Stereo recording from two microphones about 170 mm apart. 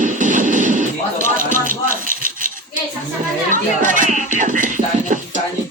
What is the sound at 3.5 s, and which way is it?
Music, 50° right (ahead or behind).